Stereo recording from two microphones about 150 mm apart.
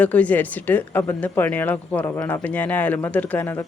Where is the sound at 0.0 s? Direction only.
10° left (ahead or behind).